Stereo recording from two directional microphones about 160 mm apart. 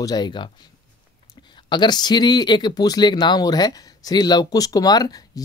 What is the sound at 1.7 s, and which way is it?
Speech, 25° left (ahead or behind).